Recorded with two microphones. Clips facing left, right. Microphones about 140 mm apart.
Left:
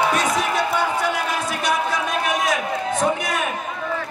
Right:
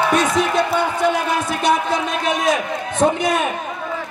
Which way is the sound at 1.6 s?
25° right (ahead or behind).